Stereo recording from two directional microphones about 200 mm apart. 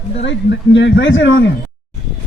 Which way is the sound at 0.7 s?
65° left (ahead or behind).